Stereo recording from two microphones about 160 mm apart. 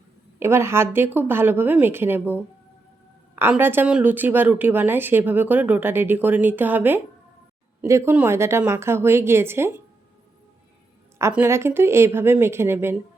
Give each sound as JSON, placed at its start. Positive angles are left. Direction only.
{"t": 0.3, "sound": "a woman's voice", "side_deg": -15}
{"t": 11.2, "sound": "a woman's voice", "side_deg": -15}